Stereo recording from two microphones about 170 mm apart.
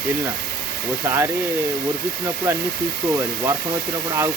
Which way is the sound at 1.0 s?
15° right (ahead or behind).